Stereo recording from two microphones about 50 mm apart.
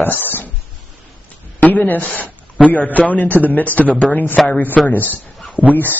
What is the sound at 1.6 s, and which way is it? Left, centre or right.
A woman's voice, left.